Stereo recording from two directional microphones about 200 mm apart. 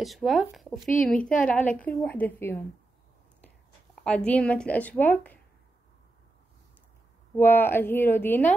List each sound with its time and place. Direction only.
0.0 s speech: centre (ahead or behind)
4.0 s speech: 5° left (ahead or behind)
7.3 s speech: 10° left (ahead or behind)